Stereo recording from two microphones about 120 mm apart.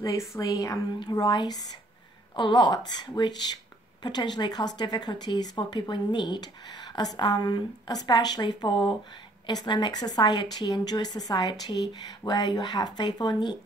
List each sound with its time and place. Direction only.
0.0 s a woman's voice: 25° left (ahead or behind)